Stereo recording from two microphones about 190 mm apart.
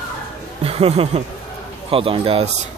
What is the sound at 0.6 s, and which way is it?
Speech, 30° right (ahead or behind).